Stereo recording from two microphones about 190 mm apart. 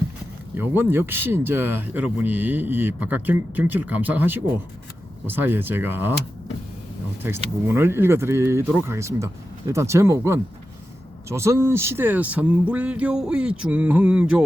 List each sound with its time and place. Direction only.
0.5 s speech: 10° right (ahead or behind)
7.7 s speech: 10° right (ahead or behind)